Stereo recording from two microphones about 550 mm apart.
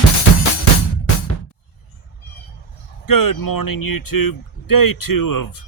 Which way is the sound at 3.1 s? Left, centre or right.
Left.